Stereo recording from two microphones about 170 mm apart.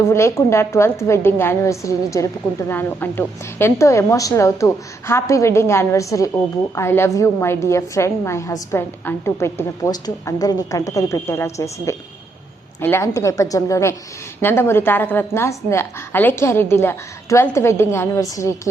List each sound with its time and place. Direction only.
0.1 s a woman's voice: 15° left (ahead or behind)